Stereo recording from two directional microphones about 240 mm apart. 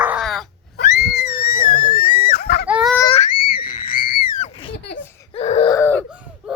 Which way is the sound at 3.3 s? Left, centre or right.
Left.